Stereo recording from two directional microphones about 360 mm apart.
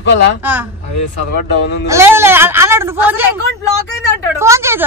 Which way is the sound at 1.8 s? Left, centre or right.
Centre.